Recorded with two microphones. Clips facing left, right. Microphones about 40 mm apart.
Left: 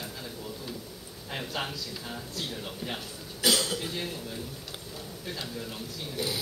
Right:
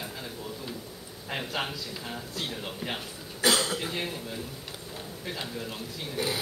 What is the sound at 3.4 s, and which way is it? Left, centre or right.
Speech, right.